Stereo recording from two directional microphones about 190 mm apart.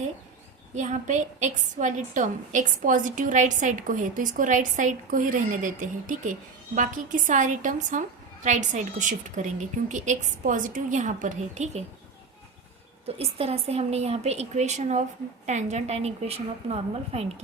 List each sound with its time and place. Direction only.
0.7 s a woman's voice: 40° right (ahead or behind)
13.1 s a woman's voice: 30° right (ahead or behind)